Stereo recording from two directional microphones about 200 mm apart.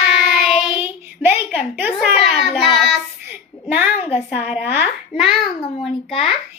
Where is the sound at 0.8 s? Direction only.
10° right (ahead or behind).